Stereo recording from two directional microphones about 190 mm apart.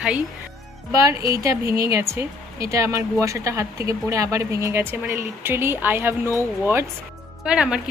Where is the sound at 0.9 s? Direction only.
20° right (ahead or behind).